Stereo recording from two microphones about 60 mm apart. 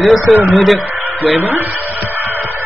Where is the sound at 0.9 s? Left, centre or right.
Right.